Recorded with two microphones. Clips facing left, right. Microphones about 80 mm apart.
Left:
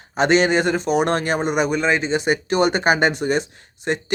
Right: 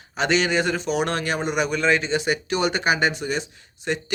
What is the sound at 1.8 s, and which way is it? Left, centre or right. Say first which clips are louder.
Speech: left 1 dB; left.